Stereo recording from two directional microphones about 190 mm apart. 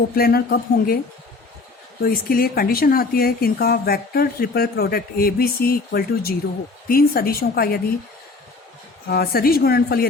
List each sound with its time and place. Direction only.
0.2 s a woman's voice: 55° left (ahead or behind)
2.0 s speech: 50° left (ahead or behind)
9.0 s a woman's voice: 55° left (ahead or behind)